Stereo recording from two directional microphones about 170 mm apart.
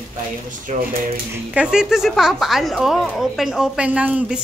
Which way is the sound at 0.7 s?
45° right (ahead or behind).